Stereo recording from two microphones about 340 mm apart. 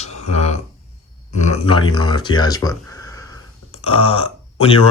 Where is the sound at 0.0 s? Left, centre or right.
Centre.